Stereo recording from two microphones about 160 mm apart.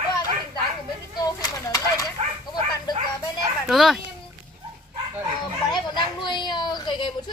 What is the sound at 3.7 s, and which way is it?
Speech, centre (ahead or behind).